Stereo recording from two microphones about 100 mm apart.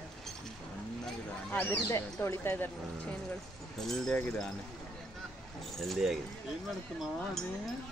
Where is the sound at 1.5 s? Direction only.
15° left (ahead or behind).